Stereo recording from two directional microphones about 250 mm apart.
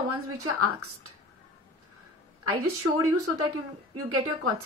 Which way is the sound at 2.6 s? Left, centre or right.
Right.